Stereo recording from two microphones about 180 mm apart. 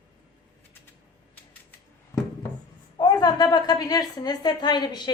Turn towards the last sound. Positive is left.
turn(degrees=25)  # may be behind; listen again after turning